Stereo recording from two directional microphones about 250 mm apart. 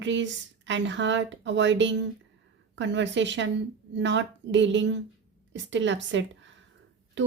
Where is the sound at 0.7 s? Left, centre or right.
Right.